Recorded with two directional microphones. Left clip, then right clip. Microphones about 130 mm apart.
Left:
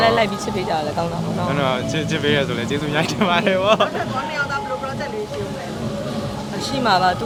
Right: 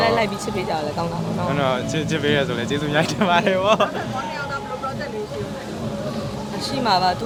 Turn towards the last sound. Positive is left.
turn(degrees=10)  # may be behind; listen again after turning